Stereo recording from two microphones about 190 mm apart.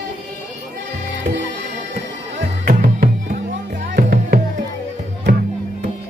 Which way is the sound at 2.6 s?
40° right (ahead or behind).